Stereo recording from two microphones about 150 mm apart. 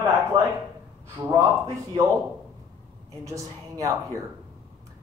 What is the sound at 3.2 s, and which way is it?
Speech, 20° right (ahead or behind).